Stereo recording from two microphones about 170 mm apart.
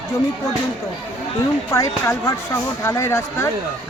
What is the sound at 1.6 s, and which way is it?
Speech, 20° left (ahead or behind).